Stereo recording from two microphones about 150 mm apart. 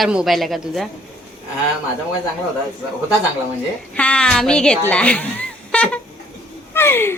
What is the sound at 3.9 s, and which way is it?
Speech, 10° left (ahead or behind).